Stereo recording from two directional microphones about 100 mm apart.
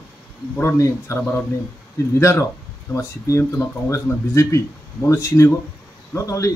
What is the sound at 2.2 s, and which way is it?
A man's voice, 30° left (ahead or behind).